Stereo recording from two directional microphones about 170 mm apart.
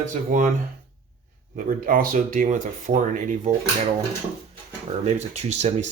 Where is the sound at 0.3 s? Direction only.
50° right (ahead or behind).